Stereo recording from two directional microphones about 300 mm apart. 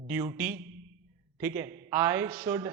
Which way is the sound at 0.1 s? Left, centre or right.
Centre.